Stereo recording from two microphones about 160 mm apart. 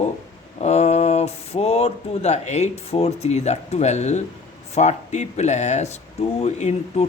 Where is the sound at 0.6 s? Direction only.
45° left (ahead or behind).